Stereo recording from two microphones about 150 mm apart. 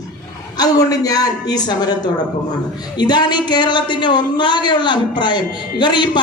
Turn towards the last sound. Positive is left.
turn(degrees=30)  # may be behind; listen again after turning